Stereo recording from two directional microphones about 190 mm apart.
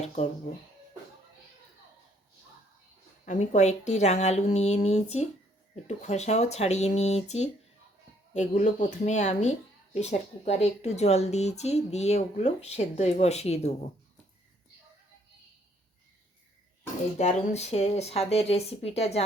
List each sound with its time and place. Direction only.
3.2 s speech: 40° left (ahead or behind)
17.2 s speech: 35° left (ahead or behind)